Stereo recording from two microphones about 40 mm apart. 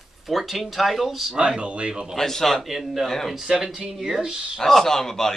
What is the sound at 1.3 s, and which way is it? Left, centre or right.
Speech, right.